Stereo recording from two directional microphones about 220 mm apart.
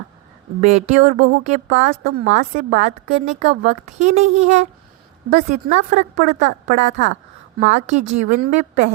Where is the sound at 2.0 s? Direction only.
60° right (ahead or behind).